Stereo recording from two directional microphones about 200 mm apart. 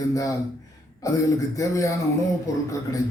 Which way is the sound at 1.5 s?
15° left (ahead or behind).